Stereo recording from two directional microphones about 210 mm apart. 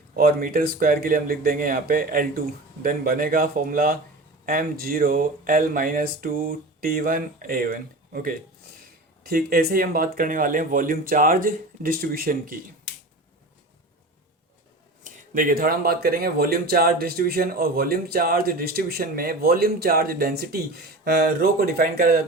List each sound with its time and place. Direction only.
0.2 s speech: 45° right (ahead or behind)
15.0 s speech: 40° right (ahead or behind)